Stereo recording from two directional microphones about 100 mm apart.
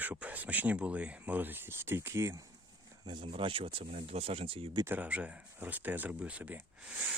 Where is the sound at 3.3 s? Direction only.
60° right (ahead or behind).